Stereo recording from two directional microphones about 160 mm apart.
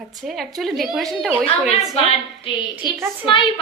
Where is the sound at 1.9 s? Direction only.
40° left (ahead or behind).